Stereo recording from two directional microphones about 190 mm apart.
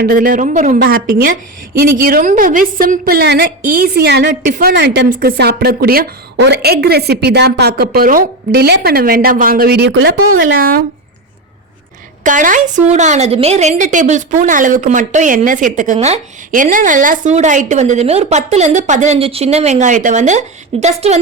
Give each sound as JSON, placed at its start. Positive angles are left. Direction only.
{"t": 0.0, "sound": "a woman's voice", "side_deg": -50}
{"t": 10.3, "sound": "a woman's voice", "side_deg": -50}
{"t": 12.2, "sound": "a woman's voice", "side_deg": -45}